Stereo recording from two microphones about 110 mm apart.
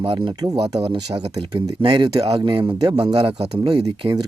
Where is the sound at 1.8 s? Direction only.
50° right (ahead or behind).